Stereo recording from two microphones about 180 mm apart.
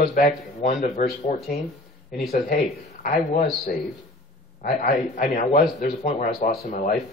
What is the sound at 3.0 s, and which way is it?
Speech, 45° left (ahead or behind).